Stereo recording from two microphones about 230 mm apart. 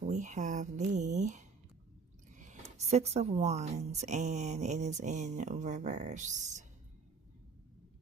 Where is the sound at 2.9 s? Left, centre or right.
Right.